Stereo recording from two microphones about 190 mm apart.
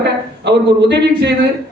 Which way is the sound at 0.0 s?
65° right (ahead or behind).